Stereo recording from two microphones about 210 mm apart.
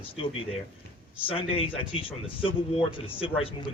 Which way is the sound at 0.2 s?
25° left (ahead or behind).